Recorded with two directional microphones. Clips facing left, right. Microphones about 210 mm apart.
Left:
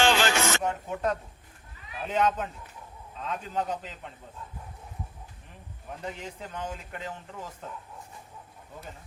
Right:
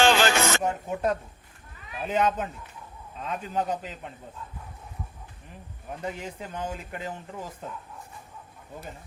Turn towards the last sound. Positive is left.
turn(degrees=-10)  # may be behind; listen again after turning